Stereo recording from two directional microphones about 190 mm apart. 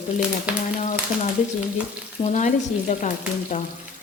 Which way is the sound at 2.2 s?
40° left (ahead or behind).